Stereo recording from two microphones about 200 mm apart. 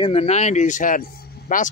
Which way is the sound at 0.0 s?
30° left (ahead or behind).